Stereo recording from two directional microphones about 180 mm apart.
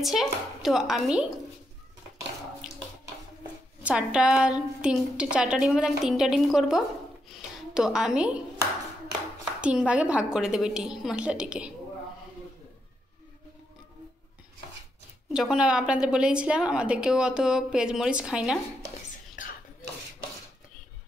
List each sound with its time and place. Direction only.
0.0 s a woman's voice: centre (ahead or behind)
3.8 s a woman's voice: 5° right (ahead or behind)
7.2 s a sound: 5° right (ahead or behind)
9.6 s a woman's voice: 5° right (ahead or behind)
15.3 s a woman's voice: 5° right (ahead or behind)
19.4 s whispering: 45° left (ahead or behind)